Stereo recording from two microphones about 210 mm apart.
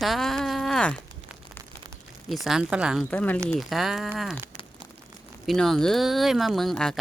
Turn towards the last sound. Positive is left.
turn(degrees=0)  # may be behind; listen again after turning